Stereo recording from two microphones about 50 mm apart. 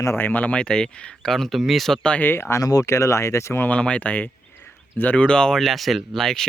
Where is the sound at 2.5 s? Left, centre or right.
Left.